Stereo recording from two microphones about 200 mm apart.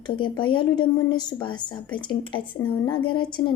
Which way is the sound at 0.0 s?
25° left (ahead or behind).